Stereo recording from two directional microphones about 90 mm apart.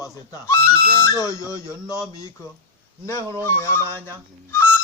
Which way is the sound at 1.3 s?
40° left (ahead or behind).